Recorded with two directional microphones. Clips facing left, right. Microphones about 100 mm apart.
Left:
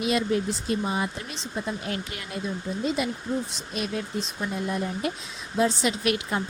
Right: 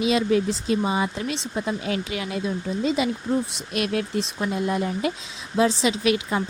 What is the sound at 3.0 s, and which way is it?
Speech, 90° right.